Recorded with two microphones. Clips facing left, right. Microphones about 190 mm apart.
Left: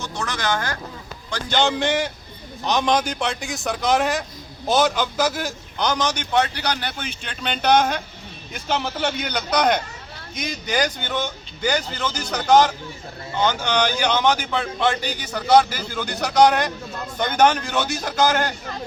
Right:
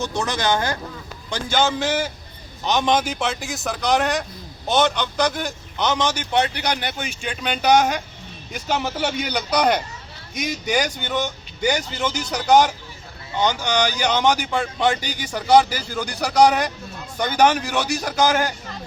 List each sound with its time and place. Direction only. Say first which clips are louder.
0.2 s speech: right 2 dB; 20° right (ahead or behind)
1.3 s a man's voice: even; 5° right (ahead or behind)
6.3 s a man's voice: left 1 dB; 15° right (ahead or behind)